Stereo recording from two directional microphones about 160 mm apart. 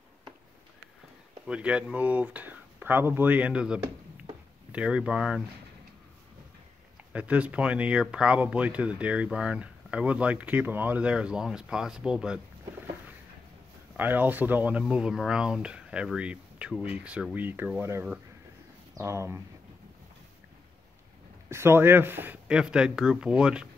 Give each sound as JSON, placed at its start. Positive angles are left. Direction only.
{"t": 1.5, "sound": "speech", "side_deg": -5}
{"t": 7.1, "sound": "speech", "side_deg": -10}
{"t": 13.9, "sound": "speech", "side_deg": -10}
{"t": 21.5, "sound": "speech", "side_deg": -15}